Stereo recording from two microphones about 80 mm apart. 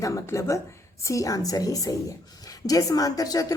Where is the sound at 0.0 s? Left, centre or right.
Left.